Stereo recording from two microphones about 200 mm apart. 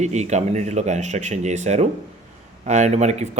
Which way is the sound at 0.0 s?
35° right (ahead or behind).